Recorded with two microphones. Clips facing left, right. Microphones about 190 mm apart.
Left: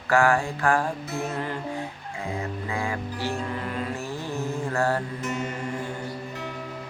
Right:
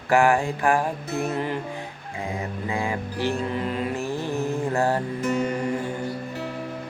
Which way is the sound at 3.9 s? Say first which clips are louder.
Right 4 dB; 15° right (ahead or behind).